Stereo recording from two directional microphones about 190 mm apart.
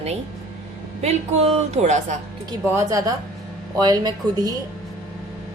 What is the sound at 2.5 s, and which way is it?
A woman's voice, 15° right (ahead or behind).